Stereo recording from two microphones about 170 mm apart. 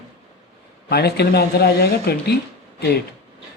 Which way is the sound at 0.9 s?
70° left (ahead or behind).